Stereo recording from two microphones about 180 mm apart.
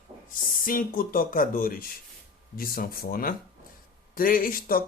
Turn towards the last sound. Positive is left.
turn(degrees=50)  # may be behind; listen again after turning